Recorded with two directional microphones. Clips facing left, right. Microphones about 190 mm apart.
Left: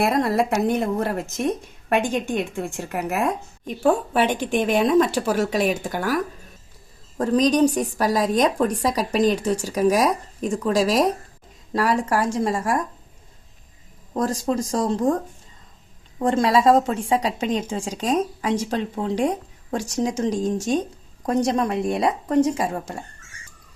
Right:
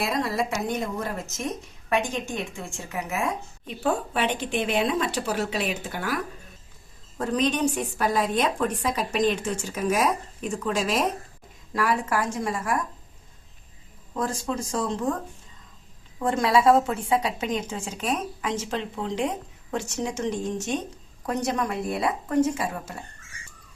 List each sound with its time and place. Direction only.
0.0 s speech: 55° left (ahead or behind)
3.2 s speech: 45° left (ahead or behind)
7.2 s a woman's voice: 40° left (ahead or behind)
14.1 s a woman's voice: 40° left (ahead or behind)
19.7 s a woman's voice: 40° left (ahead or behind)